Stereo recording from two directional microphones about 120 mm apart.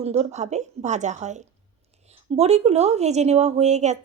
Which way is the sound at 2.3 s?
60° right (ahead or behind).